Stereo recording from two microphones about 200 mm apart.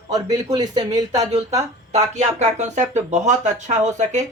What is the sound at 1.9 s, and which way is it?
Speech, 35° right (ahead or behind).